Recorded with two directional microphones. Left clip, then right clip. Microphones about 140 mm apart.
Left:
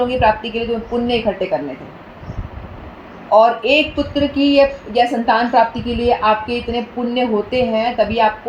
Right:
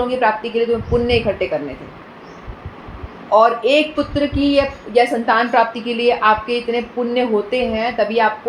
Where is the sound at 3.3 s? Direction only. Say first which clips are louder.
Left 1 dB; 40° left (ahead or behind).